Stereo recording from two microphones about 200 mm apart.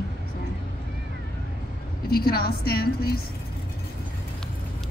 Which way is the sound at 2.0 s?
50° left (ahead or behind).